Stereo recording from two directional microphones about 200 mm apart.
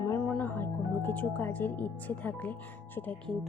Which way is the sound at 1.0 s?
10° left (ahead or behind).